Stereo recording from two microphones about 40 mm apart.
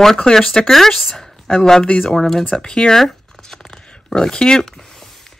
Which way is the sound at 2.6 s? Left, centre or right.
Centre.